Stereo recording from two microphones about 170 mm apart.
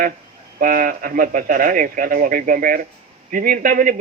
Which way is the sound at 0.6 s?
55° right (ahead or behind).